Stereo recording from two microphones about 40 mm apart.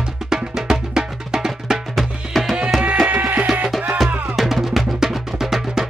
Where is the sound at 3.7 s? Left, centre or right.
Centre.